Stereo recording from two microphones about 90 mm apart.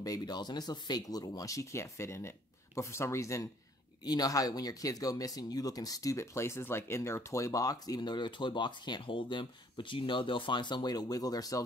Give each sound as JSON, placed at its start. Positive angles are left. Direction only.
{"t": 0.0, "sound": "speech", "side_deg": 45}
{"t": 4.0, "sound": "speech", "side_deg": 45}